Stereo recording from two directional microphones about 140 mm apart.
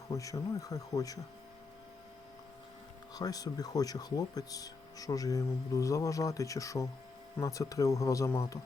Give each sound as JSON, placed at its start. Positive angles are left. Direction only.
{"t": 0.1, "sound": "speech", "side_deg": 25}
{"t": 3.2, "sound": "speech", "side_deg": 25}